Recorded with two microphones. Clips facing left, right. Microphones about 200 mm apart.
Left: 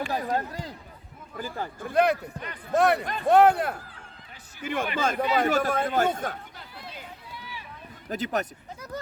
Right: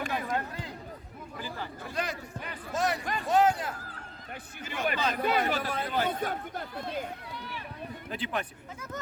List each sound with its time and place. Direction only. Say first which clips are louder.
0.1 s a sound: left 4 dB; 35° left (ahead or behind)
1.4 s a man's voice: left 6 dB; 45° left (ahead or behind)
6.5 s speech: right 8 dB; 50° right (ahead or behind)
8.1 s a man's voice: left 6 dB; 40° left (ahead or behind)